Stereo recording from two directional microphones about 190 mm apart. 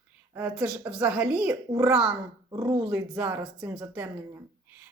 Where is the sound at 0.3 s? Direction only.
5° right (ahead or behind).